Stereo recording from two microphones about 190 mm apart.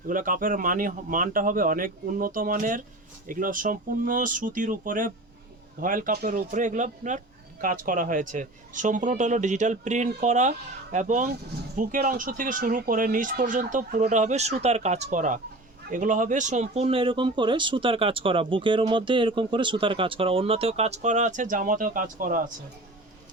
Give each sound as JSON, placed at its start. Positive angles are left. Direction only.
{"t": 0.1, "sound": "a man's voice", "side_deg": -45}